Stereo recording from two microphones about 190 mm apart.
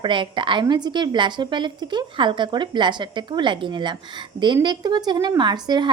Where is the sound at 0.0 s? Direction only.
25° right (ahead or behind).